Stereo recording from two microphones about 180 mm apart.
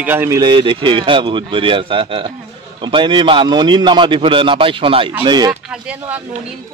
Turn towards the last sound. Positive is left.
turn(degrees=-5)  # may be behind; listen again after turning